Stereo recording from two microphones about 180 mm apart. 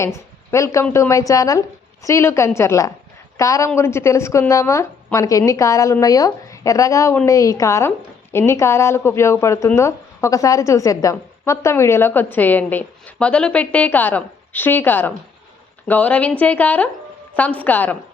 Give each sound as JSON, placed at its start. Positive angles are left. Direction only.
{"t": 0.0, "sound": "a woman's voice", "side_deg": 15}